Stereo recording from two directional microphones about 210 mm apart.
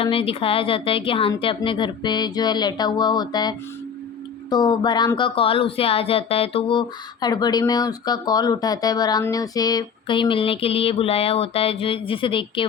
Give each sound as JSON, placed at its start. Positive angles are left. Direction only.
{"t": 0.0, "sound": "speech", "side_deg": 25}